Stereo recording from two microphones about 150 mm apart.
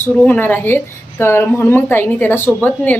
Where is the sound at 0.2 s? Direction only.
15° left (ahead or behind).